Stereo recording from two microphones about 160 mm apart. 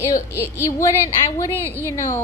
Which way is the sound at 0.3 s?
15° left (ahead or behind).